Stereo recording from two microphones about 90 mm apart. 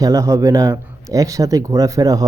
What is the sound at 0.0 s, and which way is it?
A man's voice, 35° right (ahead or behind).